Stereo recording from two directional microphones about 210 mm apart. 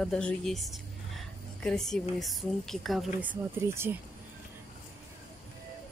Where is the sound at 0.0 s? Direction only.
5° left (ahead or behind); by 3.9 s 10° right (ahead or behind).